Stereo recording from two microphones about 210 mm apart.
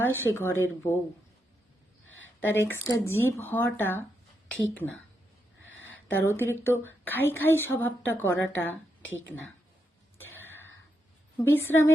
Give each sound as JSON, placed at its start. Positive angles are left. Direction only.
{"t": 0.0, "sound": "a woman's voice", "side_deg": 10}
{"t": 2.5, "sound": "a woman's voice", "side_deg": 10}
{"t": 6.1, "sound": "a woman's voice", "side_deg": 10}
{"t": 9.0, "sound": "speech", "side_deg": 65}
{"t": 10.2, "sound": "a sound", "side_deg": 10}
{"t": 11.7, "sound": "a woman's voice", "side_deg": 10}